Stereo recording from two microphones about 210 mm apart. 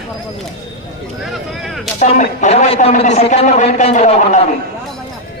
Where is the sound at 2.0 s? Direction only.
35° left (ahead or behind).